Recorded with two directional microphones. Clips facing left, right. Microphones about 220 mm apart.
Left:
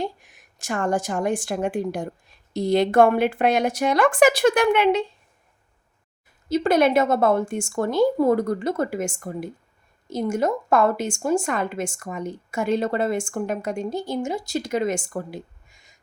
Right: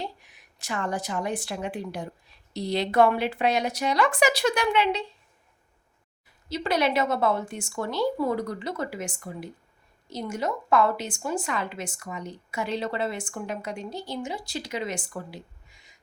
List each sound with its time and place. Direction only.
0.0 s a woman's voice: 50° left (ahead or behind)
6.5 s a woman's voice: 50° left (ahead or behind)